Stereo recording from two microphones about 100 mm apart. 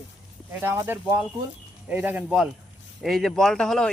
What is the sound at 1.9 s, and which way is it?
Speech, 15° right (ahead or behind).